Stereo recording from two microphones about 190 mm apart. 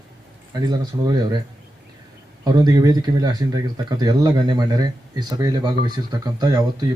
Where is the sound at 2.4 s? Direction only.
20° right (ahead or behind).